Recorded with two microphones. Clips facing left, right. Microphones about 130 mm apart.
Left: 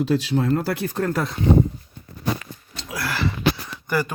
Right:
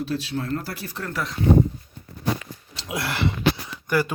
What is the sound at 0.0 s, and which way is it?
Speech, 70° left (ahead or behind).